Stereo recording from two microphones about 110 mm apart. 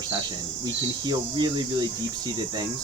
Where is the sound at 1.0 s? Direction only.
40° right (ahead or behind).